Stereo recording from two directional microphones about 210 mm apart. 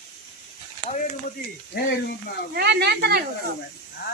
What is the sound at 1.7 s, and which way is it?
Speech, 50° left (ahead or behind).